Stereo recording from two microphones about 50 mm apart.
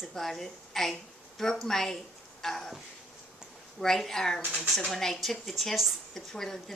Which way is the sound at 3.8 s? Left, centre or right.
Centre.